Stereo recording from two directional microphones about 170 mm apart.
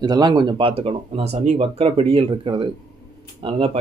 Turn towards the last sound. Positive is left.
turn(degrees=-35)  # may be behind; listen again after turning